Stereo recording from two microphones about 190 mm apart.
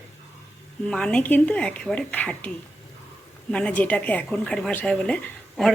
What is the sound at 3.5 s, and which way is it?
Speech, 5° left (ahead or behind).